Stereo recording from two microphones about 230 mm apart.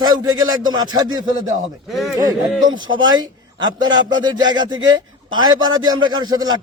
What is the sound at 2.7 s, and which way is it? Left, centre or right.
Speech, right.